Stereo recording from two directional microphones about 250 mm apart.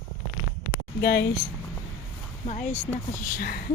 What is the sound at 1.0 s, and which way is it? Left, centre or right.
Speech, left.